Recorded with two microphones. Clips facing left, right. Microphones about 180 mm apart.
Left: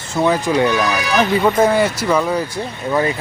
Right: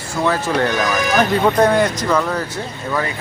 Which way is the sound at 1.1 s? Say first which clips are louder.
Left 1 dB; 5° left (ahead or behind).